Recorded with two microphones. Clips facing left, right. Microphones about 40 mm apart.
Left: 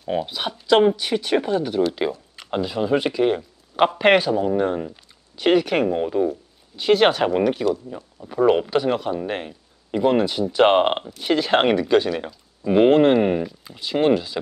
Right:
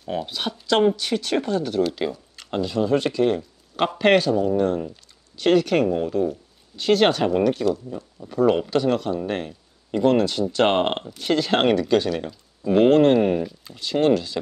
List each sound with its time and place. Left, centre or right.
0.0 s speech: centre